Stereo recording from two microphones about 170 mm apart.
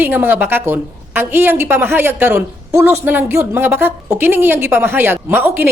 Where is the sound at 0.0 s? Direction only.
10° right (ahead or behind).